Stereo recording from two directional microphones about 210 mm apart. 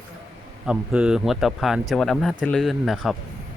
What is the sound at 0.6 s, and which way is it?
Speech, 5° right (ahead or behind).